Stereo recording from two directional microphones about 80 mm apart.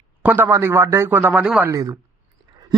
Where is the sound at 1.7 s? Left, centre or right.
Right.